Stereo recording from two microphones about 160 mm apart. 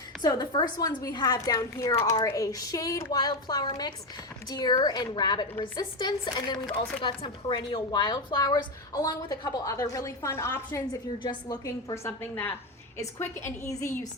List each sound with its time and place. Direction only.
0.2 s a woman's voice: 25° left (ahead or behind)
6.7 s speech: 5° left (ahead or behind)
7.0 s a woman's voice: 30° left (ahead or behind); by 10.8 s 15° left (ahead or behind)
11.2 s a woman's voice: 25° left (ahead or behind)